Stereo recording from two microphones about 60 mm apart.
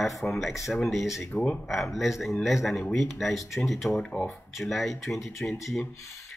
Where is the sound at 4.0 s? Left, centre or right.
Centre.